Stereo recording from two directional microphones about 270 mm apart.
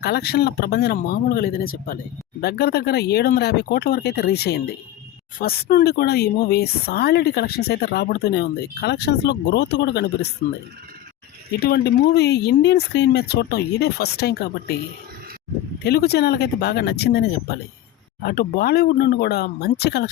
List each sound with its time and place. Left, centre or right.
0.0 s speech: left
11.5 s speech: left
15.8 s speech: left